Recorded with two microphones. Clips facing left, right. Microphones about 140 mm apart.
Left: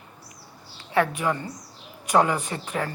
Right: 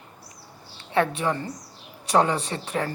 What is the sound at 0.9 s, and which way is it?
A woman's voice, 30° right (ahead or behind).